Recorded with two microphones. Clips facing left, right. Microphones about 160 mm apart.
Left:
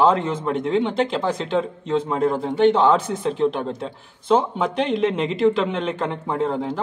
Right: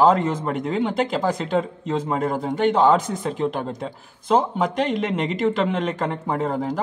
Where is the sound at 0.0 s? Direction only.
5° right (ahead or behind).